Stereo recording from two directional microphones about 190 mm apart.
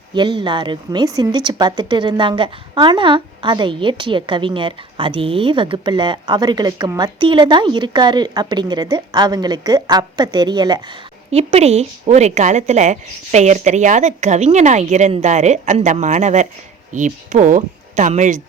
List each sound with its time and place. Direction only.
0.1 s a woman's voice: 25° right (ahead or behind)
11.3 s a woman's voice: 35° right (ahead or behind)